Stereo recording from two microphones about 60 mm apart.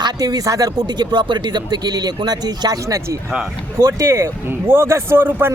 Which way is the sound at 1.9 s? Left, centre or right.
Right.